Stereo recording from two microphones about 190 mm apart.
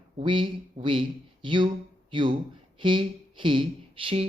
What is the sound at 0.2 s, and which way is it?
Speech, 25° right (ahead or behind).